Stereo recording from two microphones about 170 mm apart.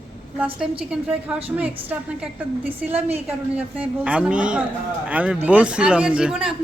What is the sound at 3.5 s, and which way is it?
A man's voice, 5° right (ahead or behind).